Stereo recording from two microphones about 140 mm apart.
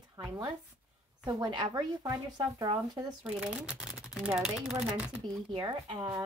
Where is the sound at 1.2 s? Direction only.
30° right (ahead or behind).